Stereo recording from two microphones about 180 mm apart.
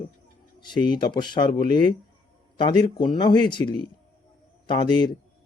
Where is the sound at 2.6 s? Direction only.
25° left (ahead or behind).